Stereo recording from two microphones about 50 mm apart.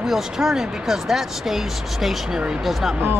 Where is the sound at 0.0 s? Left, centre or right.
Centre.